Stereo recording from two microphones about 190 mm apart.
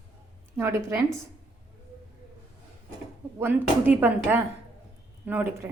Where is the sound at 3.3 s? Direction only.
10° right (ahead or behind).